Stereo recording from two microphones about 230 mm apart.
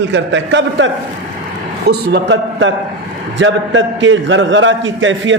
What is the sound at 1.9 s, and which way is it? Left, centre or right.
A man's voice, right.